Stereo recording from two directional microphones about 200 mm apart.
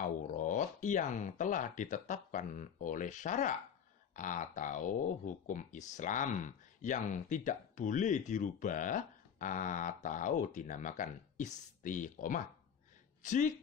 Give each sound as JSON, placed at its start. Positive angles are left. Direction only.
{"t": 0.0, "sound": "speech", "side_deg": 40}